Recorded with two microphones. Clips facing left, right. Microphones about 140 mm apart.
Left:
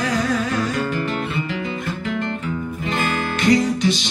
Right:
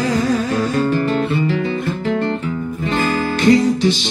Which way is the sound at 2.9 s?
35° right (ahead or behind).